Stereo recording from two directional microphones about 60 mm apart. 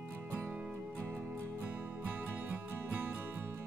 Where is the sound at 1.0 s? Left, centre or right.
Right.